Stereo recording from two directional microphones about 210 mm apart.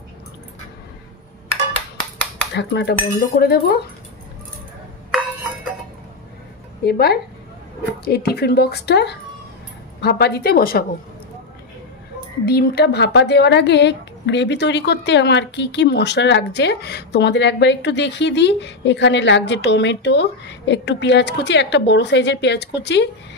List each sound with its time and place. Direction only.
2.5 s speech: 55° left (ahead or behind)
6.8 s speech: 50° left (ahead or behind)
12.4 s speech: 50° left (ahead or behind)